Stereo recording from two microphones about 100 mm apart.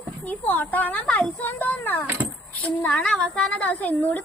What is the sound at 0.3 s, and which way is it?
A woman's voice, 15° left (ahead or behind).